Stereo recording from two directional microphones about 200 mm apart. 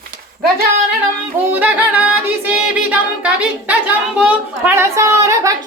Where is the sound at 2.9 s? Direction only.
5° right (ahead or behind).